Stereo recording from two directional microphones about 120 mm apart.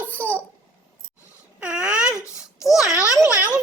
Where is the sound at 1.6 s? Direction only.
10° right (ahead or behind).